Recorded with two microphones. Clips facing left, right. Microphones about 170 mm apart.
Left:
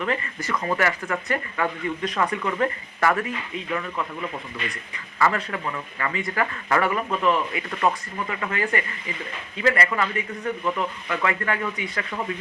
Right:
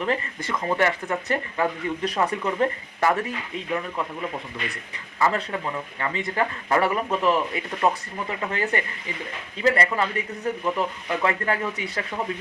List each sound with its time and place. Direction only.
0.0 s speech: 30° right (ahead or behind)
1.5 s speech: 30° right (ahead or behind)
5.2 s speech: 25° right (ahead or behind)
7.7 s speech: 20° right (ahead or behind)